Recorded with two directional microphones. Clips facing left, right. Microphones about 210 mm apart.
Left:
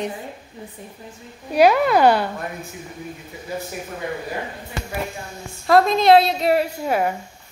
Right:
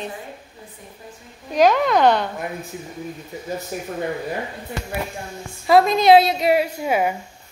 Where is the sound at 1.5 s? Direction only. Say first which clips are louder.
Left 1 dB; 10° left (ahead or behind).